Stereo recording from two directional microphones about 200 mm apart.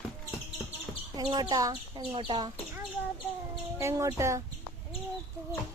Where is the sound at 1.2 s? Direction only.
20° right (ahead or behind).